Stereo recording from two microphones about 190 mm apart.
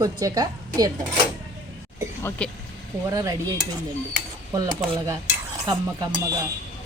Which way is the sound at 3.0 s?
20° right (ahead or behind).